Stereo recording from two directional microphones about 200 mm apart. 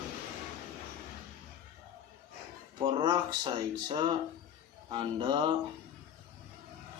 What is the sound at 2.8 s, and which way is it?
Speech, 25° right (ahead or behind).